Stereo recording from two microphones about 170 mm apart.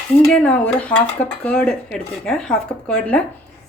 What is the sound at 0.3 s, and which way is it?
Speech, 5° left (ahead or behind).